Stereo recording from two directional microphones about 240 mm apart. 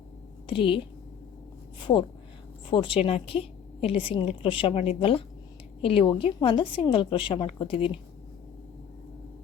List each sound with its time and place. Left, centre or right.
0.4 s a woman's voice: left
1.8 s a woman's voice: left